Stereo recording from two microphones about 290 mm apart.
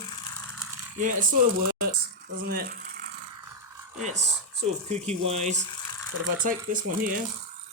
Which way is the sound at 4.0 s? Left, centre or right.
Right.